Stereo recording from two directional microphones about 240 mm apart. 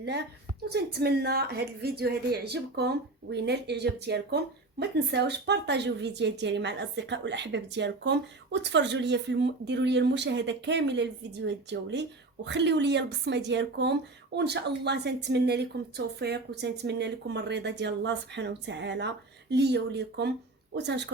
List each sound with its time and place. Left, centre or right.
0.7 s a woman's voice: right